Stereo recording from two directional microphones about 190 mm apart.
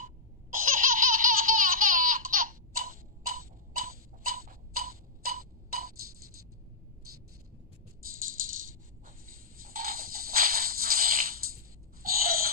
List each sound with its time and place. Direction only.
0.0 s baby laughter: 45° right (ahead or behind)
9.0 s music: 50° right (ahead or behind)
12.0 s a sound: 50° right (ahead or behind)